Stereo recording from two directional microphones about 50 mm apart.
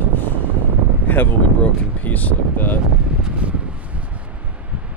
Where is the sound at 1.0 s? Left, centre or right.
Left.